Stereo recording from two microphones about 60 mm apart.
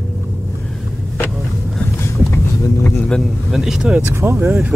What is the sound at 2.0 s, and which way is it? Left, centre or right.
Vehicle, left.